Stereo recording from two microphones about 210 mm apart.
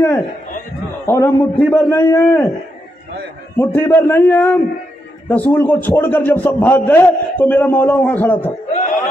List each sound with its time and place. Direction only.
1.0 s a man's voice: 10° left (ahead or behind)
3.5 s a man's voice: 10° left (ahead or behind)
8.7 s speech: 40° left (ahead or behind)